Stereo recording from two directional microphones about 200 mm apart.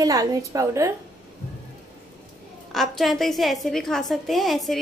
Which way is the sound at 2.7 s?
Centre (ahead or behind).